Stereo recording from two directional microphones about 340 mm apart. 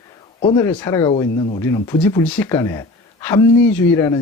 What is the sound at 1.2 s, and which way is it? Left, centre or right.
Speech, centre.